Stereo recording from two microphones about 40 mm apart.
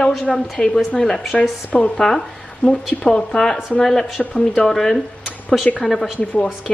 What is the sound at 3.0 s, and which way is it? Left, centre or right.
A woman's voice, centre.